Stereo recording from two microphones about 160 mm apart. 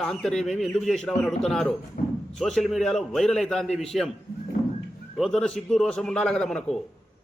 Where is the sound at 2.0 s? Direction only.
65° left (ahead or behind).